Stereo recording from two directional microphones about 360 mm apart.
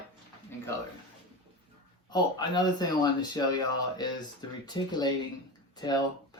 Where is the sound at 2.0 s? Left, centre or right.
Centre.